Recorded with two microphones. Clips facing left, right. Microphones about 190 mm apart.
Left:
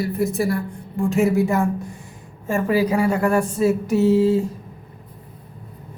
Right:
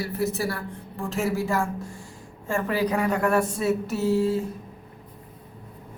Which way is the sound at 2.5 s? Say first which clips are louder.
Left 5 dB; 10° left (ahead or behind).